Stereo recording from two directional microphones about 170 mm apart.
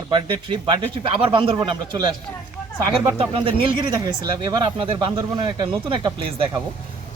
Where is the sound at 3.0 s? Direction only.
30° right (ahead or behind).